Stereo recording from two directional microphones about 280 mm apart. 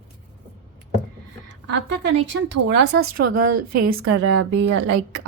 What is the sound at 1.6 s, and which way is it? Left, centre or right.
A woman's voice, right.